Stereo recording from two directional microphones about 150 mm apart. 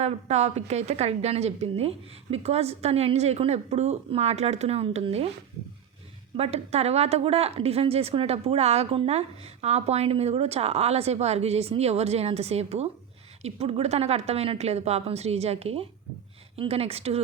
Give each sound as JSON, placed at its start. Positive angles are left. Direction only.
{"t": 0.0, "sound": "a woman's voice", "side_deg": -50}
{"t": 6.3, "sound": "a woman's voice", "side_deg": -45}